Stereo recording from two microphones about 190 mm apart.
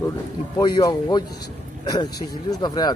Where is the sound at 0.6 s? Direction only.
20° left (ahead or behind).